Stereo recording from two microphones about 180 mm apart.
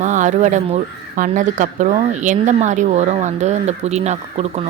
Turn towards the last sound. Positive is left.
turn(degrees=-35)  # may be behind; listen again after turning